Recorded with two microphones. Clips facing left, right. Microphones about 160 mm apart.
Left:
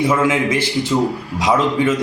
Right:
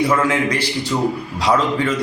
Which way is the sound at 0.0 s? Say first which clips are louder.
Left 1 dB; 10° left (ahead or behind).